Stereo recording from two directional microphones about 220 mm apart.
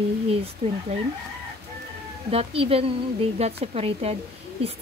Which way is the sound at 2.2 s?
25° right (ahead or behind).